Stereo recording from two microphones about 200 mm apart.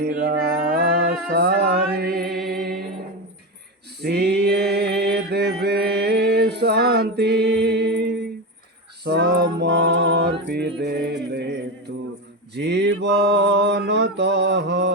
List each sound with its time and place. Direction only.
0.0 s mantra: 50° right (ahead or behind)
1.3 s music: 50° right (ahead or behind)
4.0 s mantra: 55° right (ahead or behind)
9.0 s music: 55° right (ahead or behind)
11.9 s a capella: 60° right (ahead or behind)
12.5 s mantra: 60° right (ahead or behind)